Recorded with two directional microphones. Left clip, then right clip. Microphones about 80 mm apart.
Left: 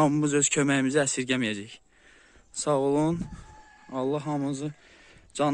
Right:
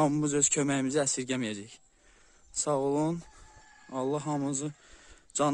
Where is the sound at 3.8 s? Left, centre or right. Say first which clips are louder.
Left 3 dB; right.